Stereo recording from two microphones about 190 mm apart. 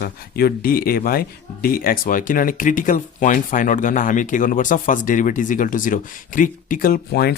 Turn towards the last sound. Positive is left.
turn(degrees=55)  # may be behind; listen again after turning